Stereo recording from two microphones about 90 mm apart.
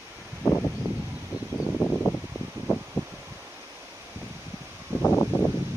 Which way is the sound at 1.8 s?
15° left (ahead or behind).